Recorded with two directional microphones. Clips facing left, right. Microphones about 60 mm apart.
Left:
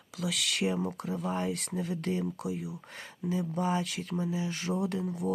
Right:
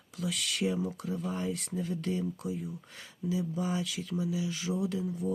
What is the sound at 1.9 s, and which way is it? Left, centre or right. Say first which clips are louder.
Speech: left 1 dB; left.